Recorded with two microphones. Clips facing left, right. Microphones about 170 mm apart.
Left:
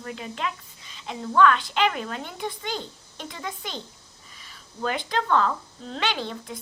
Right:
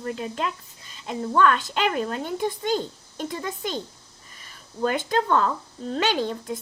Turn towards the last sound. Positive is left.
turn(degrees=-45)  # may be behind; listen again after turning